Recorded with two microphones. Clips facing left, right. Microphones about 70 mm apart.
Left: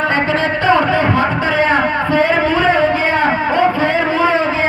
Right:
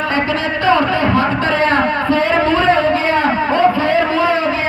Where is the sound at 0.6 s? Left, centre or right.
Left.